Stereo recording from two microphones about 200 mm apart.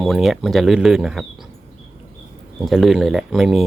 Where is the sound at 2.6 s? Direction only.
Centre (ahead or behind).